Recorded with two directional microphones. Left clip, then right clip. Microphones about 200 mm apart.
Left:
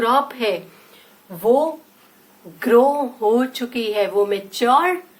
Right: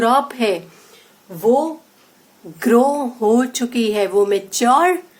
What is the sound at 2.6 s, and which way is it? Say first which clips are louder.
A woman's voice: even; 50° right (ahead or behind).